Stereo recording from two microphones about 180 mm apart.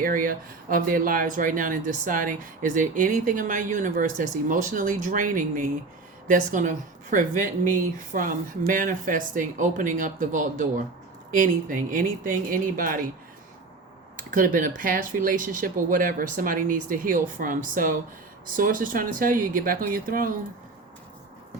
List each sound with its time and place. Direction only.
0.0 s speech: 50° right (ahead or behind)
14.2 s speech: 50° right (ahead or behind)